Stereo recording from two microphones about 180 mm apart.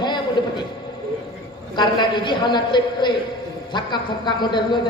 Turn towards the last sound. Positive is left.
turn(degrees=25)  # may be behind; listen again after turning